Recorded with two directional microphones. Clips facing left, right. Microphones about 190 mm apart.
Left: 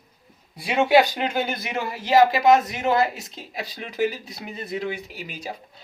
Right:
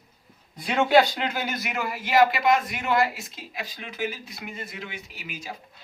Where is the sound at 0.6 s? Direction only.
15° left (ahead or behind).